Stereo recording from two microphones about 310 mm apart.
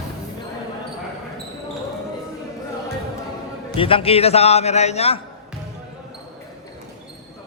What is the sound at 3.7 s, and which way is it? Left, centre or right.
A man's voice, centre.